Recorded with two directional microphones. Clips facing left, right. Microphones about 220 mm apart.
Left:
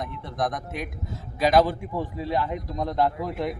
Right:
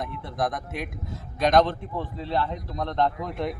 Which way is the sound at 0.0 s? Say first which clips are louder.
Even; centre (ahead or behind).